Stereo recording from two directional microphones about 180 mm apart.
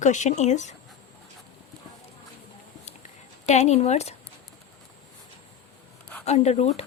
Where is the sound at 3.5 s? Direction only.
40° left (ahead or behind).